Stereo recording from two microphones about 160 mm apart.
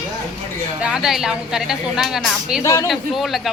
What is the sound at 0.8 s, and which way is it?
Speech, 5° right (ahead or behind).